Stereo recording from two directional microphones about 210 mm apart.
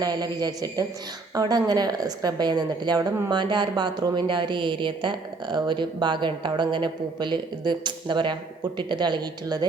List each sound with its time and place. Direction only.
0.0 s a woman's voice: 20° right (ahead or behind)